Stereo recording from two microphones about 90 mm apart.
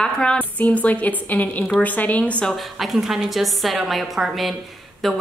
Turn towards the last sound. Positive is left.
turn(degrees=0)  # may be behind; listen again after turning